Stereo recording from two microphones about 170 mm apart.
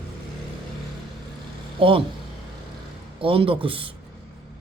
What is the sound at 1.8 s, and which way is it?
Speech, 30° right (ahead or behind).